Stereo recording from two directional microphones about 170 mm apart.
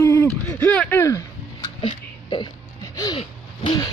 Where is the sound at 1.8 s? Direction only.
25° left (ahead or behind).